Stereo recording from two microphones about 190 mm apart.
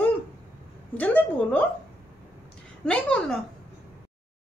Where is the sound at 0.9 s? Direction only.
5° left (ahead or behind).